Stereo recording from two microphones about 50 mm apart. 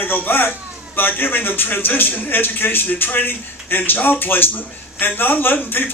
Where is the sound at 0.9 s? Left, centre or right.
Left.